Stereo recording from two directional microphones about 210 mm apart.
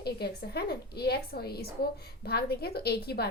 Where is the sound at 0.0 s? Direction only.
50° left (ahead or behind).